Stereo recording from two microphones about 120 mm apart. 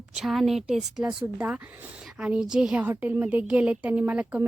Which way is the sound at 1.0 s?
15° right (ahead or behind).